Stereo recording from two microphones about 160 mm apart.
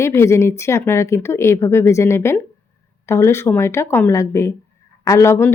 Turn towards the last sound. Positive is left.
turn(degrees=15)  # may be behind; listen again after turning